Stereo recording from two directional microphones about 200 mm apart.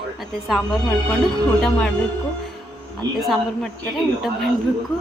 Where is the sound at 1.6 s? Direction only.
5° left (ahead or behind).